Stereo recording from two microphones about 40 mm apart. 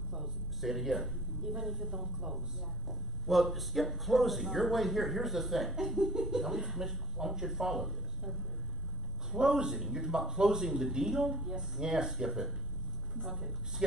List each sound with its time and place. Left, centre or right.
0.2 s a sound: centre
1.6 s speech: centre
3.3 s speech: centre
9.4 s speech: centre